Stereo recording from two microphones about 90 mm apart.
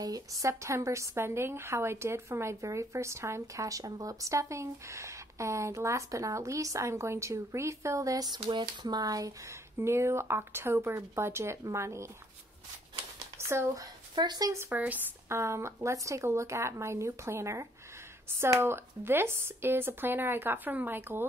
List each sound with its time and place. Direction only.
0.0 s a woman's voice: 40° right (ahead or behind)
8.3 s speech: 60° right (ahead or behind); by 9.6 s 40° right (ahead or behind)
9.8 s a woman's voice: 30° right (ahead or behind)
13.5 s a woman's voice: 30° right (ahead or behind)
14.1 s speech: 50° right (ahead or behind)
14.7 s speech: 20° right (ahead or behind)
15.2 s a woman's voice: 30° right (ahead or behind)